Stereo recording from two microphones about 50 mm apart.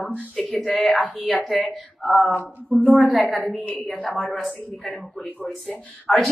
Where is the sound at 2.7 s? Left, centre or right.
Left.